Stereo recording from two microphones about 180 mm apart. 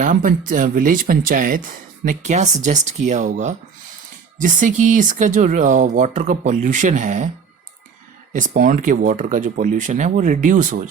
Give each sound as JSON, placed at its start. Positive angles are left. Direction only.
{"t": 0.0, "sound": "speech", "side_deg": -50}
{"t": 8.3, "sound": "speech", "side_deg": -45}